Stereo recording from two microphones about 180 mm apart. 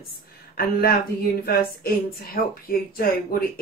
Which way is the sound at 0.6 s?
55° left (ahead or behind).